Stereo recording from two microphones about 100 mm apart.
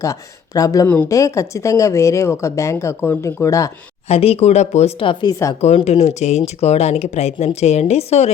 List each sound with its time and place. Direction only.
0.0 s speech: 35° left (ahead or behind)
4.1 s speech: 85° left
5.5 s speech: 90° left